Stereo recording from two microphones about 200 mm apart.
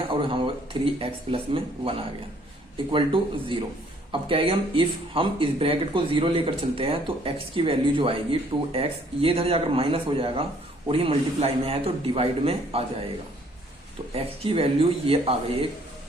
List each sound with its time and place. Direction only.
0.1 s speech: 25° right (ahead or behind)
14.1 s speech: 30° right (ahead or behind)